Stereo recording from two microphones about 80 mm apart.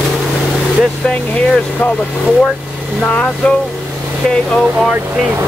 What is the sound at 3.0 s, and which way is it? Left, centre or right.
Speech, centre.